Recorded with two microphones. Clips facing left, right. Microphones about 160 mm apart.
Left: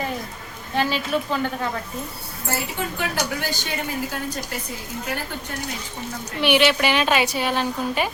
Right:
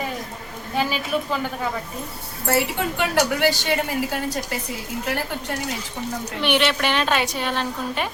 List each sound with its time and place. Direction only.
0.8 s a woman's voice: 10° right (ahead or behind)
2.5 s a woman's voice: 75° right (ahead or behind)
6.4 s a woman's voice: 5° left (ahead or behind)